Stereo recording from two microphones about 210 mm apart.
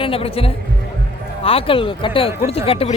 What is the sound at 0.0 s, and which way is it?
Speech, 25° left (ahead or behind).